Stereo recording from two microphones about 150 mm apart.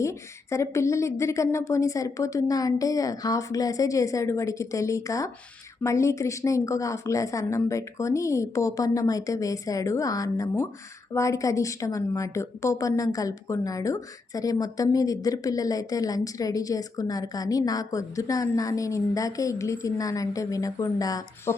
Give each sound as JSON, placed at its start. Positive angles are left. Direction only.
{"t": 0.0, "sound": "a woman's voice", "side_deg": 20}